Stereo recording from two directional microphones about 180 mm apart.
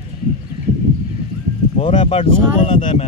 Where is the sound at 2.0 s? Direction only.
35° left (ahead or behind).